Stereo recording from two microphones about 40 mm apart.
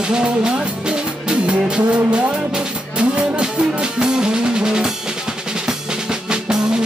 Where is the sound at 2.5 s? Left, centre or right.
Right.